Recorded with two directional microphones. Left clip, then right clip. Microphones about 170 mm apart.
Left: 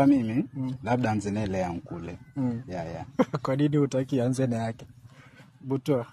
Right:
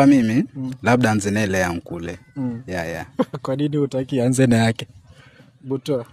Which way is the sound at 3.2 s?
10° right (ahead or behind).